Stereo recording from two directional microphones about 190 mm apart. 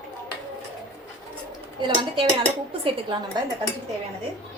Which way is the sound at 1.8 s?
25° right (ahead or behind).